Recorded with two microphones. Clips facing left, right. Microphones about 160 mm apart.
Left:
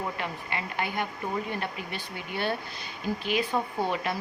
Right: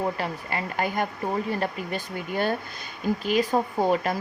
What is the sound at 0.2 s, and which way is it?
Speech, 40° right (ahead or behind).